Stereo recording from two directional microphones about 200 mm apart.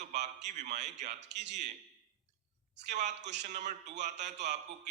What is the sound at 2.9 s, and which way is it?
A man's voice, 35° right (ahead or behind).